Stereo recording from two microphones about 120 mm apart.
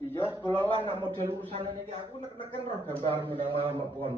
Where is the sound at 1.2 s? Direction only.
20° right (ahead or behind).